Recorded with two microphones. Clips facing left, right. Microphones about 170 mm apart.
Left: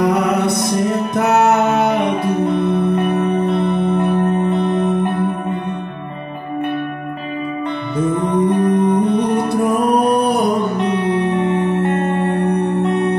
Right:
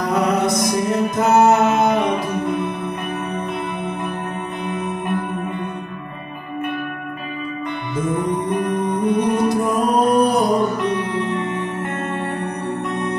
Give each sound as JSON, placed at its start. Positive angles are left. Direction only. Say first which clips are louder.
{"t": 0.0, "sound": "music", "louder": "left 3 dB", "side_deg": 65}
{"t": 8.5, "sound": "music", "louder": "left 6 dB", "side_deg": 65}
{"t": 11.9, "sound": "music", "louder": "left 7 dB", "side_deg": 30}
{"t": 12.3, "sound": "music", "louder": "left 8 dB", "side_deg": 65}